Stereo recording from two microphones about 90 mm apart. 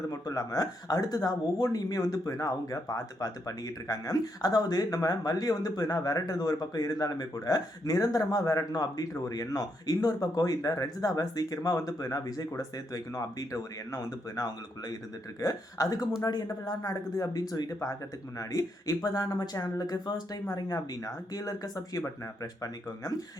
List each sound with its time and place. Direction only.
0.1 s speech: 40° left (ahead or behind)